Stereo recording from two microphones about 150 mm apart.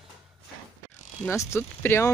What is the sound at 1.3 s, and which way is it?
Speech, 20° left (ahead or behind).